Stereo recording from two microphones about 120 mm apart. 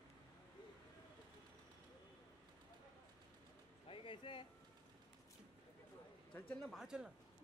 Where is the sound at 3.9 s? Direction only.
45° left (ahead or behind).